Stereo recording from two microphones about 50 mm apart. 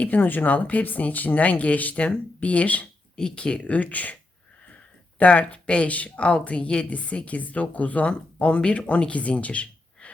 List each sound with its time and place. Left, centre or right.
0.0 s speech: left
3.2 s a woman's voice: centre
4.7 s a sound: left
6.1 s a woman's voice: left